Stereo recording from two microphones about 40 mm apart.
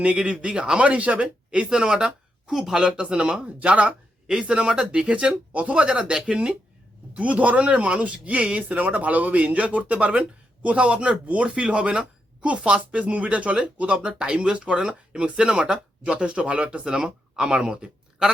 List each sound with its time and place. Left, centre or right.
0.0 s speech: right
1.5 s speech: centre
4.3 s speech: centre
7.1 s speech: right
14.8 s speech: centre
16.8 s speech: centre